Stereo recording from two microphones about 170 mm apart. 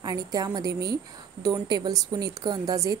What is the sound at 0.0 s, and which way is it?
A woman's voice, 20° right (ahead or behind).